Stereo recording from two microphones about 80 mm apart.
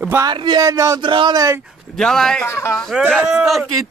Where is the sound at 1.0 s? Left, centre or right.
Right.